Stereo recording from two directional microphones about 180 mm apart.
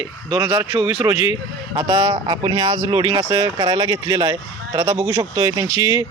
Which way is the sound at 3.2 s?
15° right (ahead or behind).